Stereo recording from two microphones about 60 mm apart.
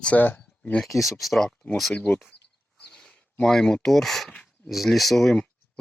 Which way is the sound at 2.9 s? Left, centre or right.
Centre.